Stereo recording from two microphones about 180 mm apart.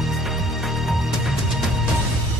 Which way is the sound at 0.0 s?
Centre (ahead or behind).